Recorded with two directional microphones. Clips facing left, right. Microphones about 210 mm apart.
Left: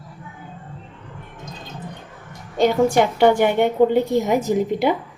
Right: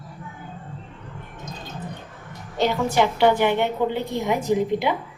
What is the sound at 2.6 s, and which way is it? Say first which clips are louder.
A woman's voice: left 5 dB; 50° left (ahead or behind).